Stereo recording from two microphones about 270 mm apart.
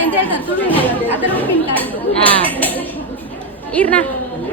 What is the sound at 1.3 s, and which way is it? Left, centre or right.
Speech, centre.